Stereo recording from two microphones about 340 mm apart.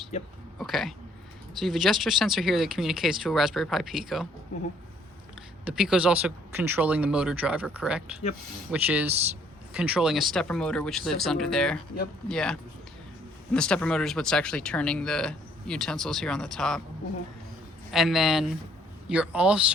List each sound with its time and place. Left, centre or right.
0.6 s speech: centre
5.6 s speech: centre
17.9 s speech: centre